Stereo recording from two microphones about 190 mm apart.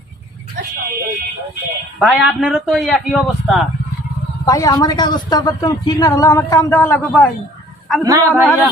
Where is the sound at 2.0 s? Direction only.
Centre (ahead or behind).